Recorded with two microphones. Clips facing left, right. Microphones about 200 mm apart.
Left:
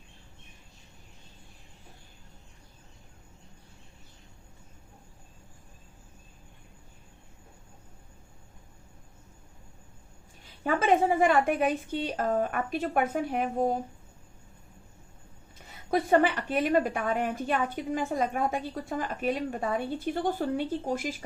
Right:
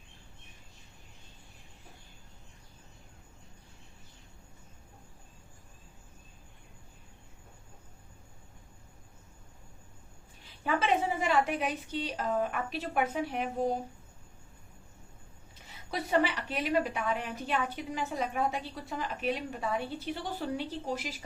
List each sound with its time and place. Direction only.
10.6 s a woman's voice: 45° left (ahead or behind)
15.6 s a woman's voice: 50° left (ahead or behind)